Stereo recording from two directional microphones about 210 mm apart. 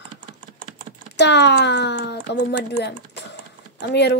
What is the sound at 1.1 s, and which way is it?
Speech, 55° left (ahead or behind).